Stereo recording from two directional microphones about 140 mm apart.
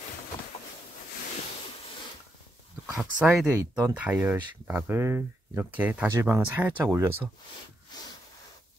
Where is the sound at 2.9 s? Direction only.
5° right (ahead or behind).